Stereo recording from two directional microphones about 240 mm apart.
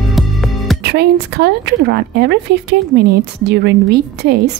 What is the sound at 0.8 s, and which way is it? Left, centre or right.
A woman's voice, right.